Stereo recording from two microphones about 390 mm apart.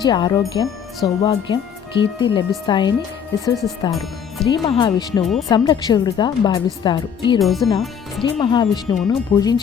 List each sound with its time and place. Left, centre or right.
0.0 s speech: centre
4.4 s speech: centre
7.3 s speech: centre
8.2 s speech: centre